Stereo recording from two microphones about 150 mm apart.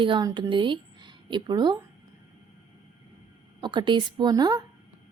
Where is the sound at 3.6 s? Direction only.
30° right (ahead or behind).